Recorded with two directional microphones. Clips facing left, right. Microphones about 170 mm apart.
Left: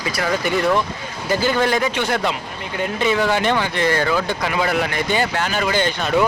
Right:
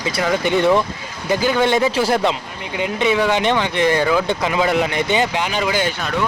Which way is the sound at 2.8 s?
15° right (ahead or behind).